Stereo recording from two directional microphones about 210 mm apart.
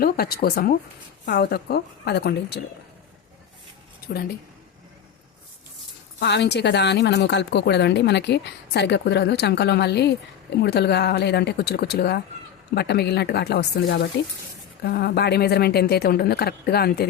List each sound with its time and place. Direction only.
0.0 s a woman's voice: 45° left (ahead or behind)
6.1 s a woman's voice: 55° left (ahead or behind)